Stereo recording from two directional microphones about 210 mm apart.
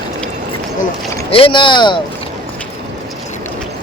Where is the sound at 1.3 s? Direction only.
25° left (ahead or behind).